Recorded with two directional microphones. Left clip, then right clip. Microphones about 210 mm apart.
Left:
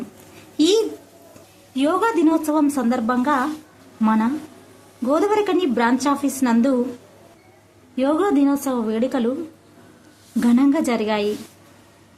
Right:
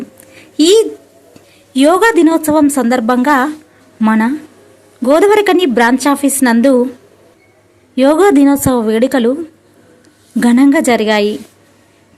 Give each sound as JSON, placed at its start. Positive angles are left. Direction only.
{"t": 0.5, "sound": "a woman's voice", "side_deg": -25}
{"t": 7.9, "sound": "a woman's voice", "side_deg": -30}
{"t": 10.4, "sound": "a woman's voice", "side_deg": -30}